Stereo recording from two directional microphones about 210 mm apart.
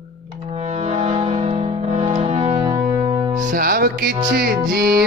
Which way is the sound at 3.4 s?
45° right (ahead or behind).